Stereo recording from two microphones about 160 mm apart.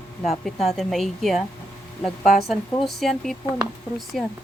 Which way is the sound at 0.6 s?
Centre (ahead or behind).